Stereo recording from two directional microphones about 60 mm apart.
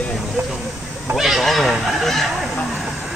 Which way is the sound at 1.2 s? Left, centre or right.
Centre.